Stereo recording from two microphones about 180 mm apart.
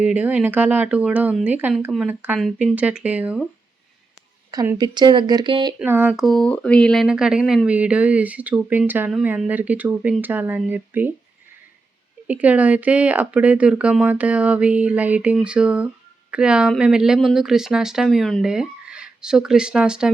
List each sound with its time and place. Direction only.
0.0 s speech: 10° right (ahead or behind)
4.5 s speech: 15° right (ahead or behind)
5.8 s speech: 10° right (ahead or behind)
12.3 s speech: 10° right (ahead or behind)